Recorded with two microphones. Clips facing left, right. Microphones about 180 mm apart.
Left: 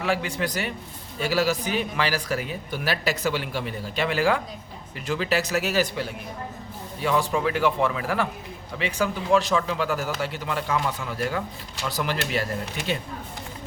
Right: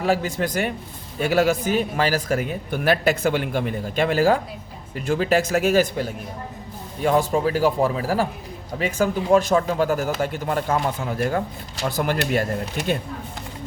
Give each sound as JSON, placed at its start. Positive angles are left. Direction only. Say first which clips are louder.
{"t": 0.0, "sound": "speech", "louder": "right 4 dB", "side_deg": -40}